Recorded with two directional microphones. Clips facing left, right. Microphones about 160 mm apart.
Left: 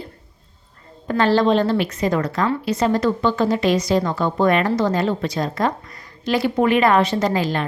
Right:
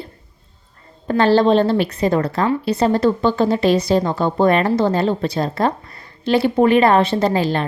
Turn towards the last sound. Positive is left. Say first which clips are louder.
# right 3 dB
turn(degrees=-30)  # may be behind; listen again after turning